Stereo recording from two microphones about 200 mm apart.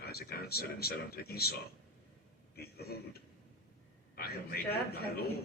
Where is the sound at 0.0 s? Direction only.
50° left (ahead or behind).